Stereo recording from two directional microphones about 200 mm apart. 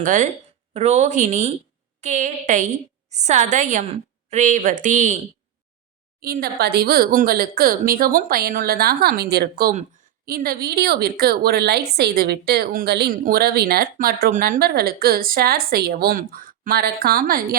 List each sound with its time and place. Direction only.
0.0 s a woman's voice: 40° right (ahead or behind)
6.2 s a woman's voice: 50° right (ahead or behind)